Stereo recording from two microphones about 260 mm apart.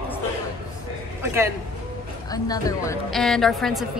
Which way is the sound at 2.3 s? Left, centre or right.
Centre.